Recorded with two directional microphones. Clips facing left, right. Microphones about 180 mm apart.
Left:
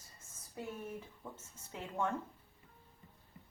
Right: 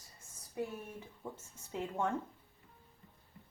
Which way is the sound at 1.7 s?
15° right (ahead or behind).